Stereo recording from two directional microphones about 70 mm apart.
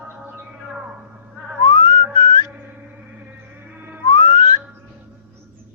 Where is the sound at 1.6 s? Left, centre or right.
Left.